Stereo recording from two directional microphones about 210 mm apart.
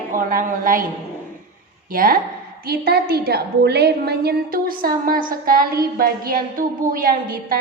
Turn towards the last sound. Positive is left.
turn(degrees=-45)  # may be behind; listen again after turning